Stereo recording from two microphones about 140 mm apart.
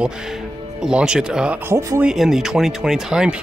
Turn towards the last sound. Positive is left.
turn(degrees=-5)  # may be behind; listen again after turning